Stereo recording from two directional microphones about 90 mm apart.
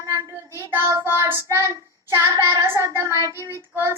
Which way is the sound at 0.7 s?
30° right (ahead or behind).